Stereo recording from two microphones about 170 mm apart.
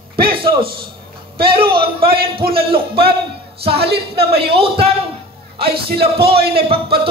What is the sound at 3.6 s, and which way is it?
Speech, 35° right (ahead or behind).